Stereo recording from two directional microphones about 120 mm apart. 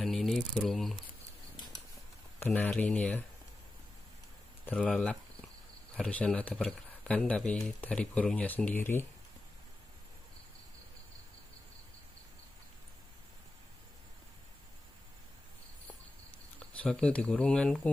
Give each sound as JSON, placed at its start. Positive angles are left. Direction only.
{"t": 0.0, "sound": "a sound", "side_deg": 0}
{"t": 2.4, "sound": "speech", "side_deg": 15}
{"t": 4.7, "sound": "speech", "side_deg": 5}
{"t": 16.3, "sound": "speech", "side_deg": 10}